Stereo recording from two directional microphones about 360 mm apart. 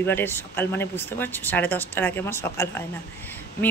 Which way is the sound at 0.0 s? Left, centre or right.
Centre.